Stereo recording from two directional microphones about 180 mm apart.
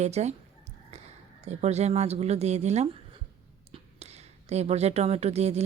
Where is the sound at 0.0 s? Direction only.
40° right (ahead or behind).